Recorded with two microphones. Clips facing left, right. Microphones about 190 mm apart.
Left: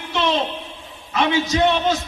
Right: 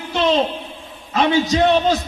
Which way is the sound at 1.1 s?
35° right (ahead or behind).